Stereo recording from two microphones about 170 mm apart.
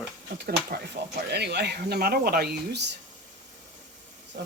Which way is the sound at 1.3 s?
80° right.